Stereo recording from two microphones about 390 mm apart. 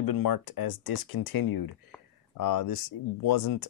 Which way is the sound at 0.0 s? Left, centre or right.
Left.